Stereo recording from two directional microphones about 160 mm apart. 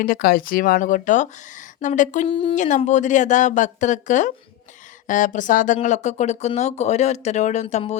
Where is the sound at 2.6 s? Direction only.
50° left (ahead or behind).